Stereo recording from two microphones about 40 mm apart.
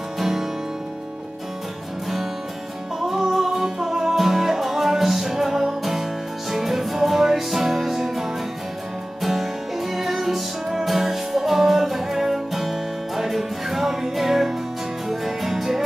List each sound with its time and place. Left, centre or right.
0.2 s music: centre
3.0 s music: centre